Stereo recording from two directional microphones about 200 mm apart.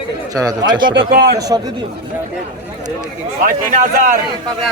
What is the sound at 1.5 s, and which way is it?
Speech, 15° right (ahead or behind).